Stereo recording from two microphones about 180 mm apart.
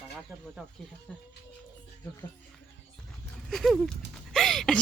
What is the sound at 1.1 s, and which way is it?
Speech, 5° left (ahead or behind).